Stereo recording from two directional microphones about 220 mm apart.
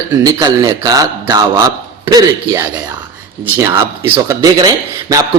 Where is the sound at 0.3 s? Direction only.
15° right (ahead or behind).